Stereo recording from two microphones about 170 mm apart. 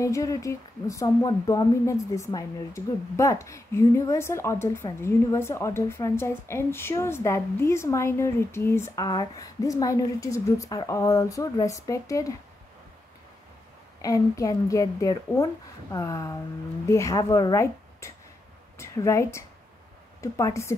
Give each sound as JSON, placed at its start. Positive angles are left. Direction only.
{"t": 0.0, "sound": "speech", "side_deg": 20}
{"t": 14.0, "sound": "a woman's voice", "side_deg": 20}